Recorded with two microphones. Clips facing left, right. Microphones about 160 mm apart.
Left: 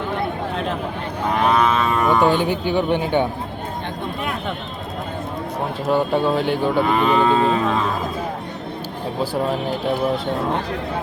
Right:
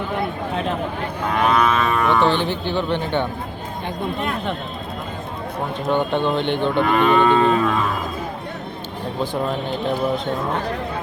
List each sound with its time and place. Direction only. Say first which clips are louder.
1.5 s cattle: even; 25° left (ahead or behind)
2.0 s speech: left 3 dB; 10° left (ahead or behind)
5.9 s speech: left 2 dB; 5° left (ahead or behind)
7.5 s speech: right 1 dB; 20° left (ahead or behind)